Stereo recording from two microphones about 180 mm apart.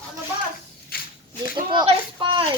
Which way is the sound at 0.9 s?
55° left (ahead or behind).